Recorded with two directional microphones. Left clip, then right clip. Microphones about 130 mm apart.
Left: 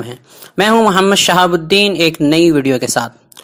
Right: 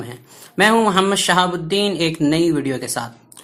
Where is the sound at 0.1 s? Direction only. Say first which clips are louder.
Left 6 dB; 50° left (ahead or behind).